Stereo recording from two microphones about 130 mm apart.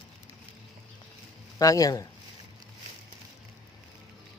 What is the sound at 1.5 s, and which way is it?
Speech, 25° left (ahead or behind).